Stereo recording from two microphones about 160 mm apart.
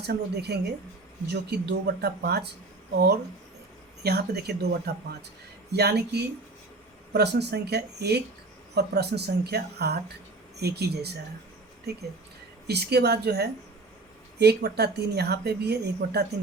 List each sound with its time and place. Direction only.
0.0 s a woman's voice: 90° right
4.0 s a woman's voice: 85° right
12.6 s a woman's voice: 90° right